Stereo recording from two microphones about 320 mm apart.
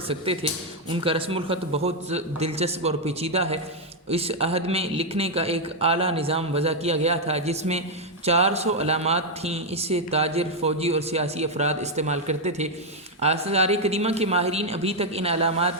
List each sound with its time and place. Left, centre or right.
0.1 s speech: centre